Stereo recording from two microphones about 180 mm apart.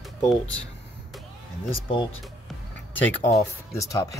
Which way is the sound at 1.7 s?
30° left (ahead or behind).